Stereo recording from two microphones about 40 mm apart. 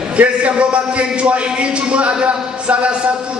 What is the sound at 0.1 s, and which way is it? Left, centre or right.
Speech, right.